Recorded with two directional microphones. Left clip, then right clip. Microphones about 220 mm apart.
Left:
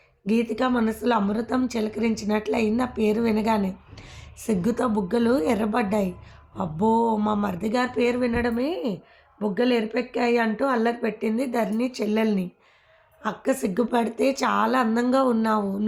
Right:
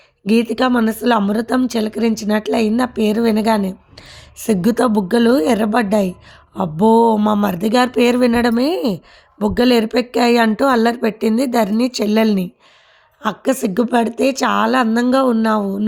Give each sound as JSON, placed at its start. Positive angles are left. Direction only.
{"t": 0.3, "sound": "a woman's voice", "side_deg": -40}